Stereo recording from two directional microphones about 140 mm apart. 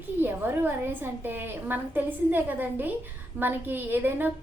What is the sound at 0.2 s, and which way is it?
Speech, 15° right (ahead or behind).